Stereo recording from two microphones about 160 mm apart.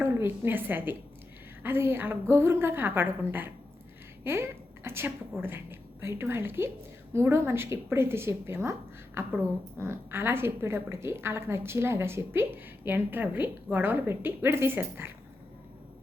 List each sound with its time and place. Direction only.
0.0 s a woman's voice: 15° right (ahead or behind)